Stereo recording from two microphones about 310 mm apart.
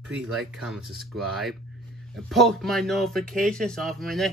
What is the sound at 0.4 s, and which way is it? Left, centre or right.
Speech, centre.